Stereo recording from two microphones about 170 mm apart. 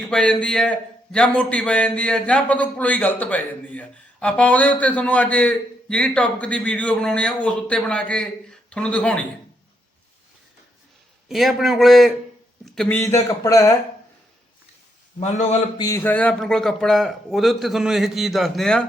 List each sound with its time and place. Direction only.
0.0 s speech: 5° left (ahead or behind)
11.3 s a man's voice: centre (ahead or behind)
13.0 s speech: 15° left (ahead or behind)
15.2 s a man's voice: 40° left (ahead or behind)
15.8 s a man's voice: 15° left (ahead or behind)